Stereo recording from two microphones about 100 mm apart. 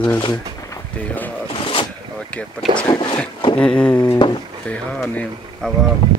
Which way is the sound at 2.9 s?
55° left (ahead or behind).